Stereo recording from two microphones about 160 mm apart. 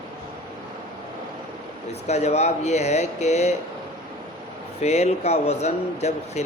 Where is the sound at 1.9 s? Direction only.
45° left (ahead or behind).